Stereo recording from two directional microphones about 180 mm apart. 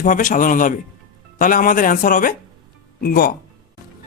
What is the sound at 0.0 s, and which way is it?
Speech, 45° left (ahead or behind).